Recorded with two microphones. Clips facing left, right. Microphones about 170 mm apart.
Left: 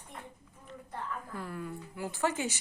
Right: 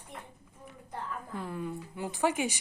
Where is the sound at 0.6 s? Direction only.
15° right (ahead or behind).